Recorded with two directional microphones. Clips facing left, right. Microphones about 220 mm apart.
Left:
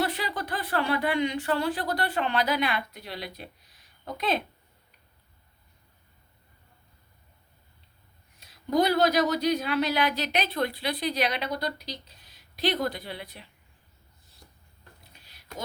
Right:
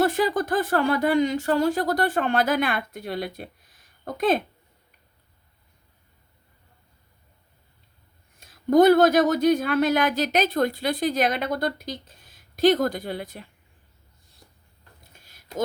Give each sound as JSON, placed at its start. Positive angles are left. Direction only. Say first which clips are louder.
{"t": 0.0, "sound": "speech", "louder": "right 8 dB", "side_deg": -45}
{"t": 8.4, "sound": "speech", "louder": "right 8 dB", "side_deg": -50}
{"t": 15.1, "sound": "a sound", "louder": "right 8 dB", "side_deg": -45}